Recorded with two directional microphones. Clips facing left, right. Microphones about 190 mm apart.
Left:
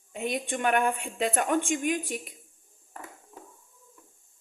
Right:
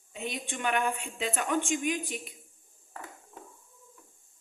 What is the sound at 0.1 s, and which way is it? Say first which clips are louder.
A woman's voice: left 6 dB; 50° left (ahead or behind).